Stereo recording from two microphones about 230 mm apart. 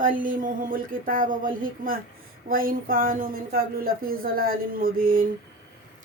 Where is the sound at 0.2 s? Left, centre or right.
Right.